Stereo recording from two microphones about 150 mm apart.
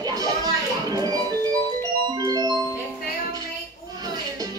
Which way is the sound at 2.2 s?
25° right (ahead or behind).